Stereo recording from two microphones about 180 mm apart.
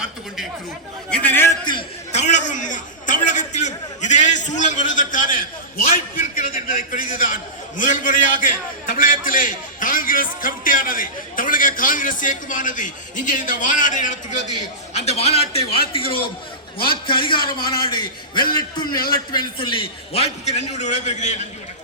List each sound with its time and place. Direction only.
1.1 s a man's voice: 10° left (ahead or behind)
2.1 s a sound: 40° left (ahead or behind)
6.3 s a man's voice: 50° left (ahead or behind); by 16.1 s 30° left (ahead or behind)
16.7 s a man's voice: 55° left (ahead or behind)
17.1 s a man's voice: 25° left (ahead or behind)